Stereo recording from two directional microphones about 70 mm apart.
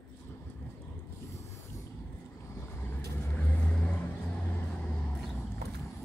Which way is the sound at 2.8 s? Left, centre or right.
Left.